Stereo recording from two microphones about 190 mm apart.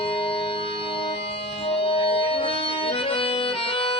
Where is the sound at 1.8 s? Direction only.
30° left (ahead or behind).